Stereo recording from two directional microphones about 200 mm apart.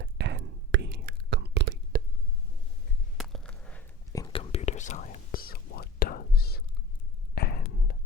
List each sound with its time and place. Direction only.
0.0 s whispering: 60° right (ahead or behind)
3.2 s a sound: 5° left (ahead or behind)
4.1 s whispering: 20° left (ahead or behind); by 7.6 s 50° left (ahead or behind)